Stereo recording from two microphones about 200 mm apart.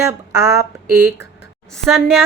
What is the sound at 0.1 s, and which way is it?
Speech, 15° right (ahead or behind).